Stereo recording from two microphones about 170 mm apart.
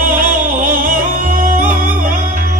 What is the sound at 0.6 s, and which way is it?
Music, 55° right (ahead or behind).